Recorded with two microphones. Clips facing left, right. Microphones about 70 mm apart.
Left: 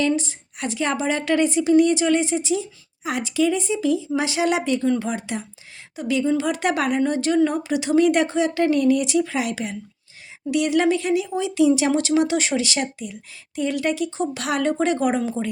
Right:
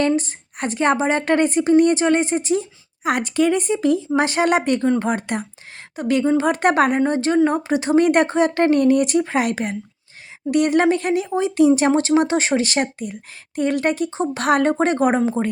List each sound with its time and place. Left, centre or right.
0.2 s a woman's voice: right